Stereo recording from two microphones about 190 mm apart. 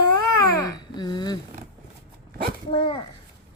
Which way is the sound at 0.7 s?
20° left (ahead or behind).